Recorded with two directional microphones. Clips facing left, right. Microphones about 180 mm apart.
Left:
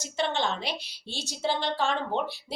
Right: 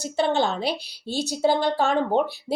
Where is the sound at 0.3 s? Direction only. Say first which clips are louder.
Right 7 dB; 40° right (ahead or behind).